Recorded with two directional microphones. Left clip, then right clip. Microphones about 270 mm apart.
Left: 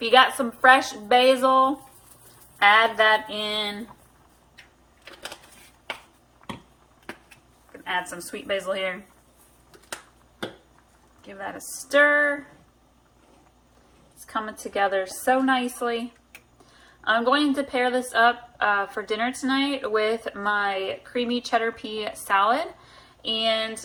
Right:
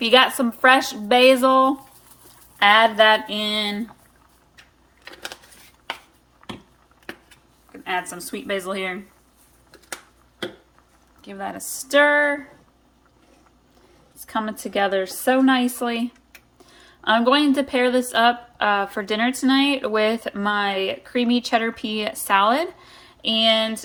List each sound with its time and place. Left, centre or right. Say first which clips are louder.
0.0 s a woman's voice: right 2 dB; right
7.7 s speech: right 2 dB; right
11.3 s a woman's voice: right 4 dB; right
14.3 s a woman's voice: right 4 dB; right